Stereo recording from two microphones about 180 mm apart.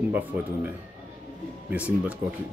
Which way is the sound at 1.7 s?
10° right (ahead or behind).